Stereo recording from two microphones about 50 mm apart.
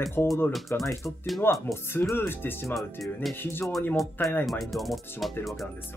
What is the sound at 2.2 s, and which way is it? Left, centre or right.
Speech, left.